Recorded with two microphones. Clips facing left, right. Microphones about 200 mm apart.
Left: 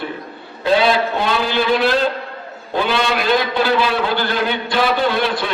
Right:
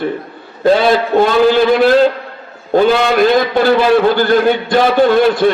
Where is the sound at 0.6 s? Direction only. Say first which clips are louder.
Right 5 dB; 45° right (ahead or behind).